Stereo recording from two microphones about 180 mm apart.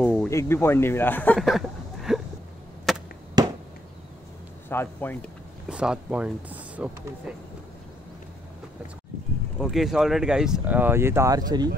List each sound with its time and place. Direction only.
0.3 s a man's voice: 15° left (ahead or behind)
1.4 s a sound: centre (ahead or behind)
2.9 s chop: centre (ahead or behind)
3.4 s a sound: 25° right (ahead or behind)
4.6 s a man's voice: 10° left (ahead or behind)
5.7 s speech: 5° right (ahead or behind)
9.6 s speech: centre (ahead or behind); by 11.7 s 20° right (ahead or behind)